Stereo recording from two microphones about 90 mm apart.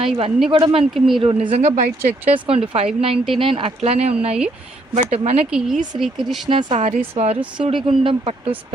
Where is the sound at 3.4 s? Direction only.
75° right (ahead or behind); by 4.0 s 90° right.